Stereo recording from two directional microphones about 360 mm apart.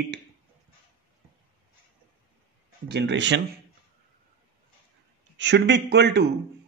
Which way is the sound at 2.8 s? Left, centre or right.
Right.